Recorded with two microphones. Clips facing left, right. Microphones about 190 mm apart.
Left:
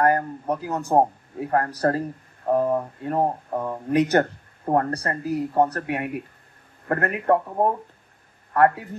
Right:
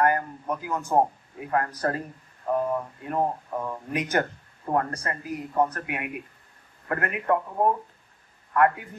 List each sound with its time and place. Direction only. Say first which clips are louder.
0.0 s speech: left 3 dB; 35° left (ahead or behind)
8.5 s speech: left 3 dB; 35° left (ahead or behind)